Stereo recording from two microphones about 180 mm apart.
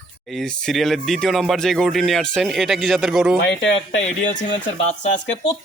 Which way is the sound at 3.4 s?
90° left.